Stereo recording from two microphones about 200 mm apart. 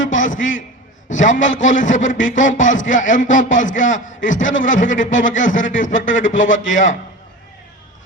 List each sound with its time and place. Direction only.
0.1 s a man's voice: 40° left (ahead or behind)